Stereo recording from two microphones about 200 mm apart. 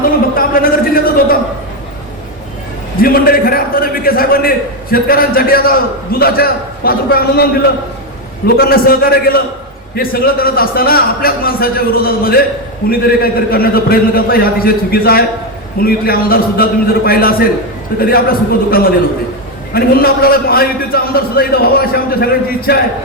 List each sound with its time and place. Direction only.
0.0 s a sound: 45° left (ahead or behind)
3.0 s a man's voice: 45° left (ahead or behind)
8.4 s a man's voice: 50° left (ahead or behind)